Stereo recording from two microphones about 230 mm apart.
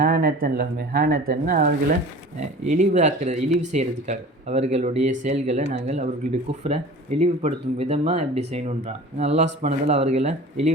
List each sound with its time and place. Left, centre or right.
0.0 s speech: right